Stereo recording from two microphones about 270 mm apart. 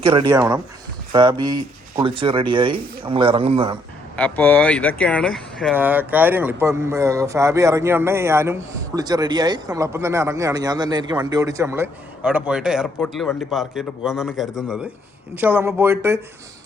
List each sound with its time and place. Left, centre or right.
0.0 s speech: centre
4.2 s a man's voice: centre